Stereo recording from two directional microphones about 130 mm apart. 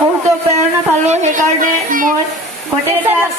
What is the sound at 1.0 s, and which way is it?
A woman's voice, 60° right (ahead or behind).